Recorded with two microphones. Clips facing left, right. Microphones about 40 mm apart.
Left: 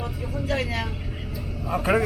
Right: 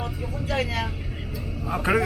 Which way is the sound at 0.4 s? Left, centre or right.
Centre.